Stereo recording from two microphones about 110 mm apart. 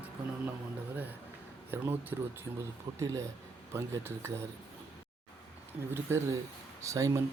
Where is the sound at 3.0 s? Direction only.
30° right (ahead or behind).